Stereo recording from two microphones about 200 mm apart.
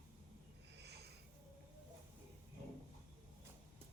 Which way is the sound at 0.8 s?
55° right (ahead or behind).